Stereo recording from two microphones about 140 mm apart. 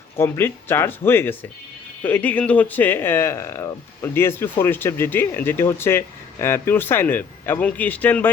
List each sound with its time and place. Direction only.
0.2 s speech: 15° left (ahead or behind)